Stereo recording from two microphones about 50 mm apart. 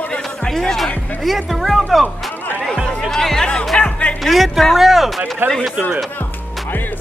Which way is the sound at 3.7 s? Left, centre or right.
Left.